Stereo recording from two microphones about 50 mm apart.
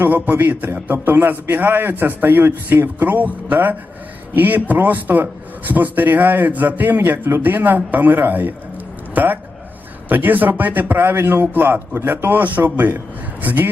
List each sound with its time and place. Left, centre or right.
0.0 s a man's voice: right